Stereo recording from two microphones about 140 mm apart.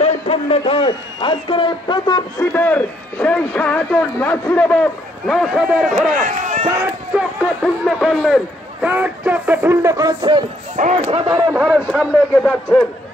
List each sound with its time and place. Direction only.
0.0 s a man's voice: 50° left (ahead or behind); by 2.2 s 30° left (ahead or behind)
2.5 s speech: 15° left (ahead or behind)
5.2 s a man's voice: centre (ahead or behind)
6.1 s speech: 60° right (ahead or behind)
7.1 s speech: 10° right (ahead or behind)
7.6 s a man's voice: centre (ahead or behind); by 10.4 s 30° right (ahead or behind)
10.8 s speech: 55° right (ahead or behind)
11.5 s speech: 5° right (ahead or behind)
11.9 s speech: 10° left (ahead or behind)